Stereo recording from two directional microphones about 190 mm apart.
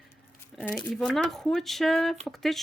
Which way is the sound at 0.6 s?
10° left (ahead or behind).